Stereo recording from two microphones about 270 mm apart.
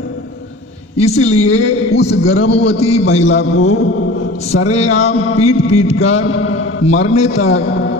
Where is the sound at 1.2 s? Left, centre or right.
Left.